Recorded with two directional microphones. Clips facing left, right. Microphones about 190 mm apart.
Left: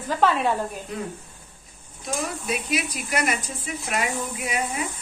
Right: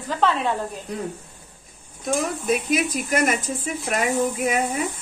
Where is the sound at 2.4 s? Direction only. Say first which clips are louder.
Right 5 dB; 50° right (ahead or behind).